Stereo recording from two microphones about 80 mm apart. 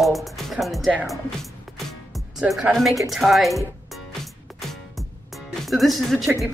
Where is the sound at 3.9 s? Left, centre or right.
Centre.